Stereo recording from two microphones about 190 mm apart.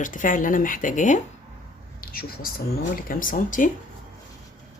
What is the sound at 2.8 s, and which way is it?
Speech, 45° left (ahead or behind).